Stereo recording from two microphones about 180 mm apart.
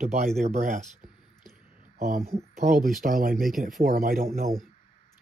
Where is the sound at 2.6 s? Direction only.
45° right (ahead or behind).